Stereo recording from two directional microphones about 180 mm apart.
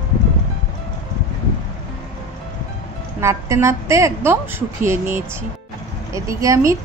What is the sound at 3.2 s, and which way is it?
A woman's voice, 15° right (ahead or behind).